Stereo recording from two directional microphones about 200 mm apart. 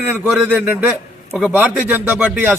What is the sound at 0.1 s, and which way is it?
A man's voice, 10° right (ahead or behind).